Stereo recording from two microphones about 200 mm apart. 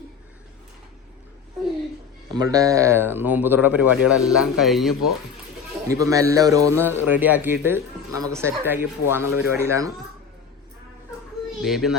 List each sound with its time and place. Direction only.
2.3 s a man's voice: 20° right (ahead or behind); by 5.1 s centre (ahead or behind)
5.9 s a man's voice: 15° right (ahead or behind)
11.6 s speech: centre (ahead or behind)